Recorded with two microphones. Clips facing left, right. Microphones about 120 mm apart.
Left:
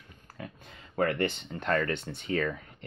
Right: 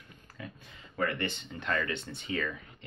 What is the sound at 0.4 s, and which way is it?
Speech, 55° left (ahead or behind).